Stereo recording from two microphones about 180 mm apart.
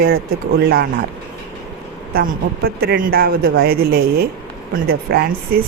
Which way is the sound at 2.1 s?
60° right (ahead or behind).